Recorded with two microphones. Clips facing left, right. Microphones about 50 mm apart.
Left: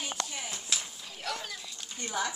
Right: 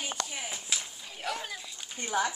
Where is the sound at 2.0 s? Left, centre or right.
Right.